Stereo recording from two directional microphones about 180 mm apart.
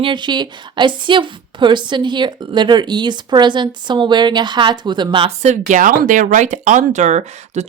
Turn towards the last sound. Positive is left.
turn(degrees=-40)  # may be behind; listen again after turning